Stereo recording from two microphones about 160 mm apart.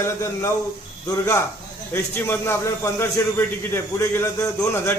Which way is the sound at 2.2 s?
15° left (ahead or behind).